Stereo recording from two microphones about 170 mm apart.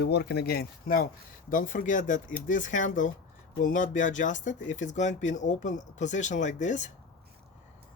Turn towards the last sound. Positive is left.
turn(degrees=45)  # may be behind; listen again after turning